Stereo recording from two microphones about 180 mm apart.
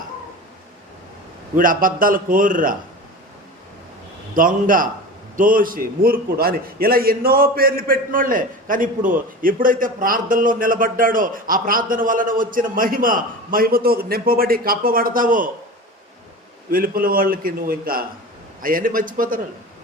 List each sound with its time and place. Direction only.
1.5 s a man's voice: 50° right (ahead or behind)
4.4 s a man's voice: 50° right (ahead or behind)
16.7 s a man's voice: 55° right (ahead or behind)